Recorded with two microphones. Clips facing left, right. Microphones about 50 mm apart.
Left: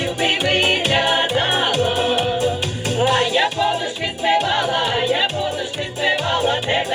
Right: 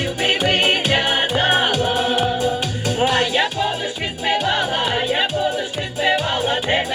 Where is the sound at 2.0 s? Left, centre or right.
Left.